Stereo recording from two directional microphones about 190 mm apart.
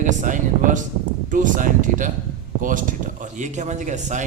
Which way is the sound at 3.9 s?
40° right (ahead or behind).